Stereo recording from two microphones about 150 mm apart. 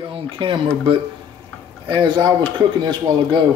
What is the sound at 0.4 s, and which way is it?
A man's voice, 35° right (ahead or behind).